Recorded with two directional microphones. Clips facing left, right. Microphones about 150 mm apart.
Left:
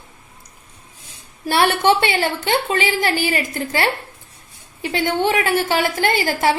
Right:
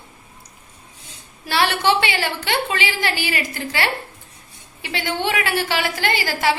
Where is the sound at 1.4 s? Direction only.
50° left (ahead or behind).